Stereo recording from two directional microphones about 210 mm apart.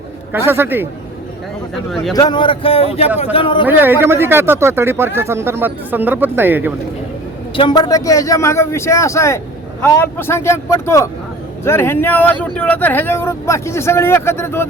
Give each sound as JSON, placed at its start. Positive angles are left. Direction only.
{"t": 0.3, "sound": "speech", "side_deg": -10}
{"t": 1.7, "sound": "speech", "side_deg": 0}
{"t": 2.1, "sound": "speech", "side_deg": 20}
{"t": 3.7, "sound": "speech", "side_deg": -10}
{"t": 7.5, "sound": "speech", "side_deg": 20}